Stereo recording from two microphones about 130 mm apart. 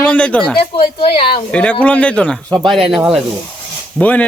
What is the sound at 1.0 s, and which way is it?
Speech, 45° left (ahead or behind).